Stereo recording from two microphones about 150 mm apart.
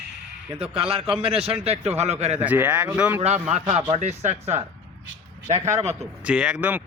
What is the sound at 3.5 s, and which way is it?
Speech, 50° right (ahead or behind).